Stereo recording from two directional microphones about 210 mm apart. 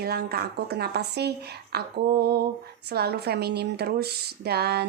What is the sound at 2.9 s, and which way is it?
Speech, 50° right (ahead or behind).